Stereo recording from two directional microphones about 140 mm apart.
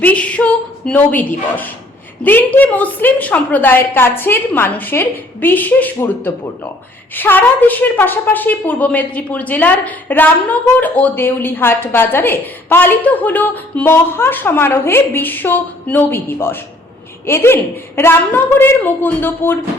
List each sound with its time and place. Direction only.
0.0 s a woman's voice: 10° left (ahead or behind)